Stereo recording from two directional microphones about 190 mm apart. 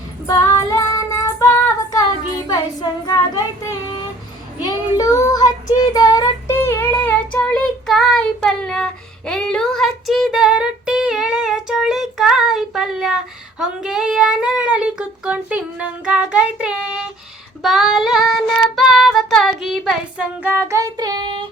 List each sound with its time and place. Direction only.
0.3 s child singing: 20° left (ahead or behind); by 21.4 s 25° right (ahead or behind)